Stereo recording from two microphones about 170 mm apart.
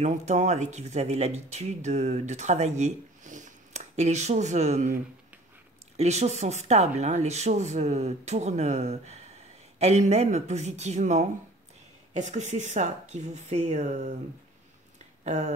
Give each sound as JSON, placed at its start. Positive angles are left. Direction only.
{"t": 0.0, "sound": "speech", "side_deg": -40}
{"t": 5.9, "sound": "speech", "side_deg": -40}
{"t": 15.2, "sound": "speech", "side_deg": -45}